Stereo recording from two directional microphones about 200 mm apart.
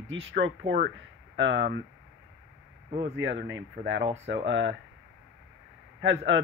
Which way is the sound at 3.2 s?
70° right (ahead or behind).